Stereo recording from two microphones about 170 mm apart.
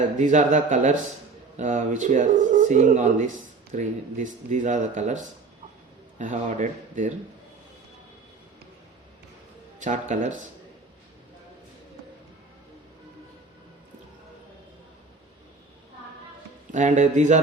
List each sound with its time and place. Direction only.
0.2 s speech: 45° right (ahead or behind)
9.8 s speech: 45° right (ahead or behind)
16.7 s speech: 45° right (ahead or behind)